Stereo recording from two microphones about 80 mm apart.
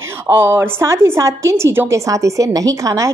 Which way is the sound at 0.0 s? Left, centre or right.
Right.